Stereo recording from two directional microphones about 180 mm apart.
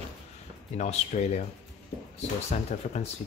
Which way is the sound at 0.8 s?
40° left (ahead or behind).